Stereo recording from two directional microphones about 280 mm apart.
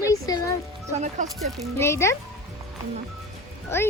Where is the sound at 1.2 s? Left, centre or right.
Right.